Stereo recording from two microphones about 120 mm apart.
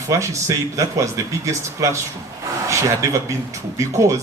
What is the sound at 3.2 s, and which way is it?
Speech, 25° right (ahead or behind).